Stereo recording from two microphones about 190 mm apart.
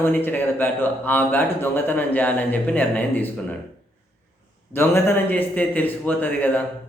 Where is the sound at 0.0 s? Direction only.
10° left (ahead or behind).